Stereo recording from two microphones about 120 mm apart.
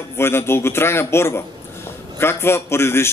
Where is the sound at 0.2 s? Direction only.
20° left (ahead or behind).